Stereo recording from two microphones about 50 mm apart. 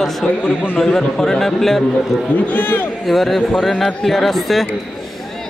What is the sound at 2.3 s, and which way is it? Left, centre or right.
Speech, left.